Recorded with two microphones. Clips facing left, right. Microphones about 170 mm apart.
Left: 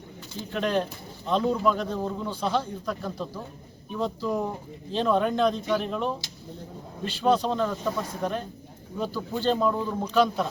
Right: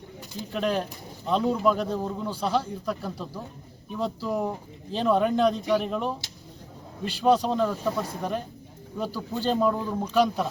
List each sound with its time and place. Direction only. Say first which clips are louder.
0.5 s speech: left 1 dB; 5° right (ahead or behind)